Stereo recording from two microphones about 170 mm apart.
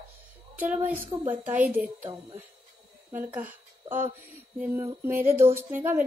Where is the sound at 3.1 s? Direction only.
10° right (ahead or behind).